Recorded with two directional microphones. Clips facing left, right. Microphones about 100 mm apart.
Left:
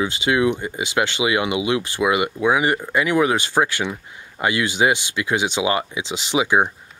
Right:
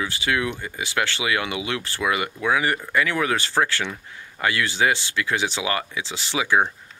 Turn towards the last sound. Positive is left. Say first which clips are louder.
# left 3 dB
turn(degrees=20)  # may be behind; listen again after turning